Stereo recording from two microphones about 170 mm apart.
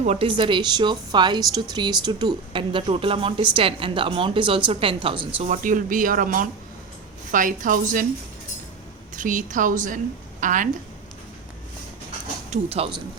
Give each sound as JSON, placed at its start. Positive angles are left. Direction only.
{"t": 0.0, "sound": "a woman's voice", "side_deg": -35}
{"t": 5.5, "sound": "speech", "side_deg": -50}
{"t": 9.1, "sound": "speech", "side_deg": -50}
{"t": 12.5, "sound": "speech", "side_deg": -35}